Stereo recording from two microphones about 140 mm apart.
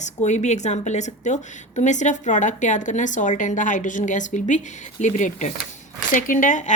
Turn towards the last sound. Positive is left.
turn(degrees=65)  # may be behind; listen again after turning